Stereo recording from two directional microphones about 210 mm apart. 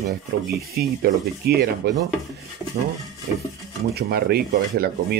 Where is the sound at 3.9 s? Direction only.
50° right (ahead or behind).